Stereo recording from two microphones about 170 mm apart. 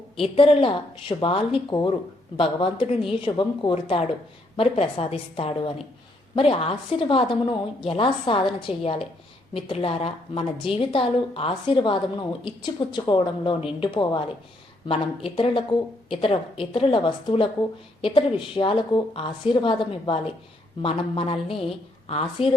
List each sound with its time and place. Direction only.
0.2 s a woman's voice: 35° left (ahead or behind)